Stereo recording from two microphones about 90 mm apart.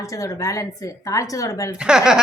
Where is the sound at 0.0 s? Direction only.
35° left (ahead or behind).